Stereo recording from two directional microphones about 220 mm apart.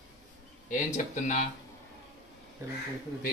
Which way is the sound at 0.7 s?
35° left (ahead or behind).